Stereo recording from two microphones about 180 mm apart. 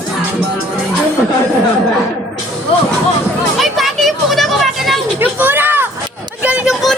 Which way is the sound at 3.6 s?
Centre (ahead or behind).